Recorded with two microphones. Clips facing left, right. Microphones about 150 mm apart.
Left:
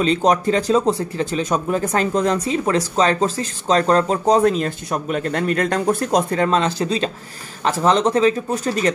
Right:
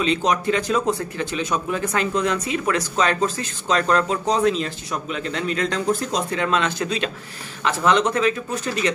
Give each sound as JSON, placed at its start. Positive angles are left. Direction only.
{"t": 0.0, "sound": "speech", "side_deg": 40}
{"t": 6.4, "sound": "speech", "side_deg": 35}